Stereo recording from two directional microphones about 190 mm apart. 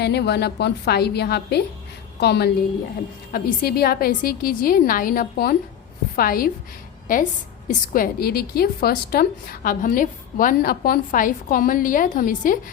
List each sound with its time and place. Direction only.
0.0 s a woman's voice: 60° left (ahead or behind); by 12.5 s 45° left (ahead or behind)